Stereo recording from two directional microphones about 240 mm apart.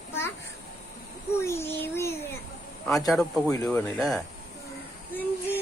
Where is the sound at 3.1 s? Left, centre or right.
Centre.